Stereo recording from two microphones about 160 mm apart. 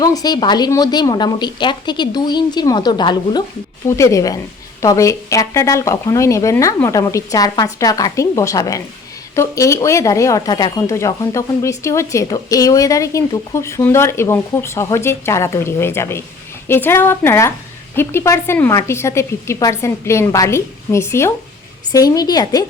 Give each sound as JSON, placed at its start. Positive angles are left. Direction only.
{"t": 0.0, "sound": "a woman's voice", "side_deg": 25}